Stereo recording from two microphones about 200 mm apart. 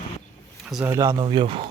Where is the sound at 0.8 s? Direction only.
15° right (ahead or behind).